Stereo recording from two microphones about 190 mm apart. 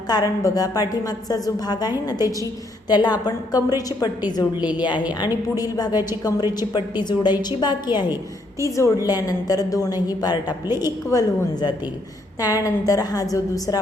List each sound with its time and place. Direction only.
0.1 s a woman's voice: 20° left (ahead or behind)